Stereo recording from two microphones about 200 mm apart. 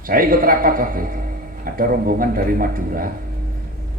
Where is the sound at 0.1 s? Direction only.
45° right (ahead or behind).